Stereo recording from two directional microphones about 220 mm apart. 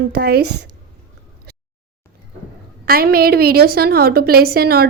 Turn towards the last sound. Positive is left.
turn(degrees=-45)  # may be behind; listen again after turning